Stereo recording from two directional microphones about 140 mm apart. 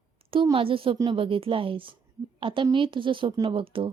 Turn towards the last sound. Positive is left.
turn(degrees=-40)  # may be behind; listen again after turning